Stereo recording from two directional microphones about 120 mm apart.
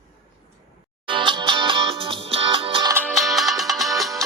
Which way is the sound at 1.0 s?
40° right (ahead or behind).